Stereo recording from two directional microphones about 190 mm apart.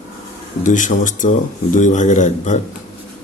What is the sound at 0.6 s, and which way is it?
A man's voice, 40° left (ahead or behind).